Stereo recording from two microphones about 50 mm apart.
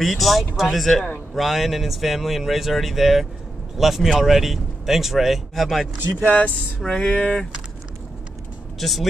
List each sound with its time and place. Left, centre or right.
0.0 s speech: centre
6.3 s speech: left
6.9 s a sound: centre
8.7 s speech: centre